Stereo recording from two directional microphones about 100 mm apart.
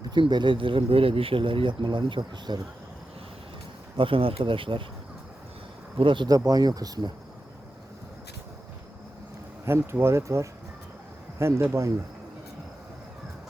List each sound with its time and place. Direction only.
0.0 s speech: 45° right (ahead or behind)
3.9 s speech: 60° right (ahead or behind)
6.0 s speech: 60° right (ahead or behind)
6.2 s speech: 40° right (ahead or behind)
9.6 s speech: 25° right (ahead or behind)